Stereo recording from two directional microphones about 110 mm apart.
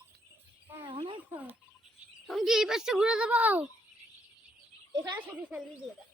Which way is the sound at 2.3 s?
Centre (ahead or behind).